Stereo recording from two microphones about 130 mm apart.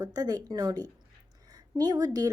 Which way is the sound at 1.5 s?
30° right (ahead or behind).